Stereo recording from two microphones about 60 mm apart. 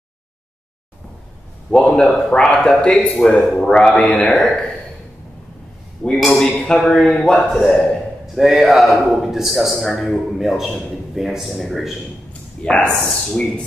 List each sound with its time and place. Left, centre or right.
1.7 s speech: centre
6.1 s a man's voice: centre
6.6 s speech: centre
8.4 s a man's voice: centre
12.3 s a sound: centre
12.9 s a man's voice: centre